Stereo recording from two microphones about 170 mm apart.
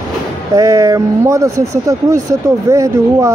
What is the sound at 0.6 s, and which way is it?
Speech, 20° right (ahead or behind).